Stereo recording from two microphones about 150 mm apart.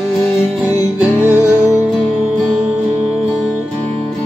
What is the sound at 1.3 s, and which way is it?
Music, 20° left (ahead or behind).